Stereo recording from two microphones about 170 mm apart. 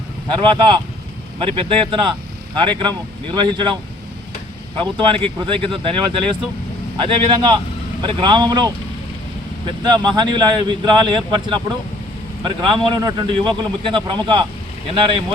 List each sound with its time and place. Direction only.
0.3 s a man's voice: 30° right (ahead or behind)
4.8 s a man's voice: 30° right (ahead or behind)